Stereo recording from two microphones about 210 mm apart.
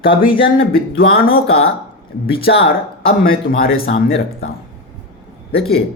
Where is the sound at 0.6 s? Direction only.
70° left (ahead or behind).